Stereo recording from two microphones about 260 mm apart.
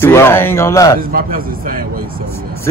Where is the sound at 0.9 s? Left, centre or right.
Right.